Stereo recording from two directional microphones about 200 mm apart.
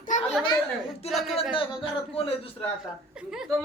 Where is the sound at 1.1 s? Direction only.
Centre (ahead or behind).